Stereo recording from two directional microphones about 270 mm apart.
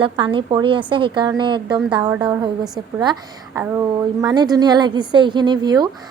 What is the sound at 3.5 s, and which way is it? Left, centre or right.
A woman's voice, centre.